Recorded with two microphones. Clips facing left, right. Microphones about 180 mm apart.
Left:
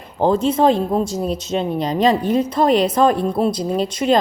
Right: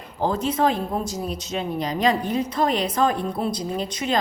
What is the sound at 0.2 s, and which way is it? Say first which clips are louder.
Speech: left 6 dB; 25° left (ahead or behind).